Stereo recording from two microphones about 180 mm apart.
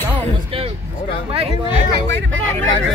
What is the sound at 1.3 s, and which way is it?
Speech, 30° right (ahead or behind).